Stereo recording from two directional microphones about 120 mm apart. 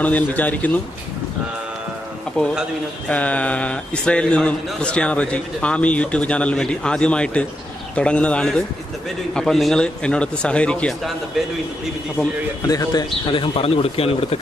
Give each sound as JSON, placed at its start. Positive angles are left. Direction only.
{"t": 0.0, "sound": "a man's voice", "side_deg": 15}
{"t": 3.1, "sound": "a man's voice", "side_deg": 10}
{"t": 12.6, "sound": "a man's voice", "side_deg": 30}
{"t": 13.3, "sound": "a man's voice", "side_deg": 45}